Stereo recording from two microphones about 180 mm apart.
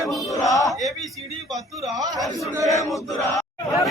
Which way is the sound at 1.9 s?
20° right (ahead or behind).